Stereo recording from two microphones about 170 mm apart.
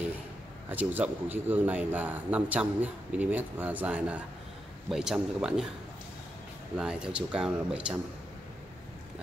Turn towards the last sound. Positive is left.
turn(degrees=-5)  # may be behind; listen again after turning